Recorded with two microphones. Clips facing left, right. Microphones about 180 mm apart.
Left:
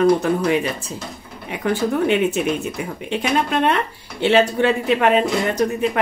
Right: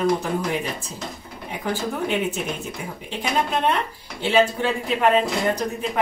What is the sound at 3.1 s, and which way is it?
Speech, 70° left (ahead or behind).